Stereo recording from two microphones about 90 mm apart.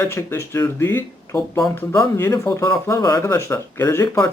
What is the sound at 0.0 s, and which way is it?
Speech, 30° left (ahead or behind).